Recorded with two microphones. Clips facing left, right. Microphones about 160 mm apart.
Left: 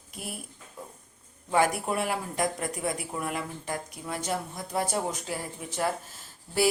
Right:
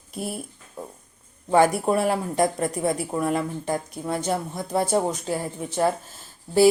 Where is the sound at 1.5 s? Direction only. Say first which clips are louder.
Right 7 dB; 30° right (ahead or behind).